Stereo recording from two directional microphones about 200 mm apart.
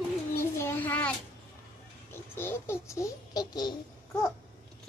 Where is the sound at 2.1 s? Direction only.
10° left (ahead or behind).